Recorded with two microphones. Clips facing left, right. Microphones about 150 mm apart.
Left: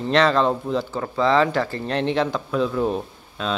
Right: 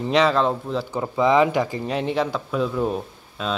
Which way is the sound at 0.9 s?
15° right (ahead or behind).